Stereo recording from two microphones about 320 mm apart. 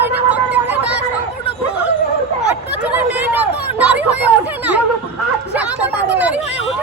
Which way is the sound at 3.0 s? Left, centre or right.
Centre.